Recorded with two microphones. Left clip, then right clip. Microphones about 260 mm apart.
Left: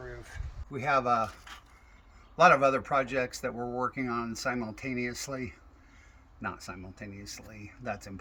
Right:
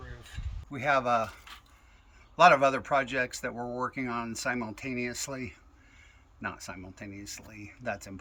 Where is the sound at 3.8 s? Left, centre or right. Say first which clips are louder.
Left 1 dB; centre.